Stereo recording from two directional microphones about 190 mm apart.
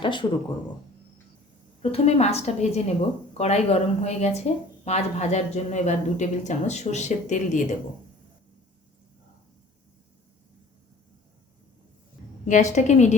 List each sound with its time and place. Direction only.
0.0 s speech: 25° left (ahead or behind)
1.8 s a woman's voice: 30° left (ahead or behind)
12.5 s a woman's voice: 40° left (ahead or behind)